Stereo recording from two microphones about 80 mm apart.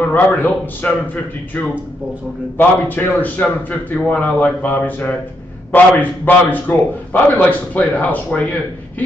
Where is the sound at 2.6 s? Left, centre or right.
Left.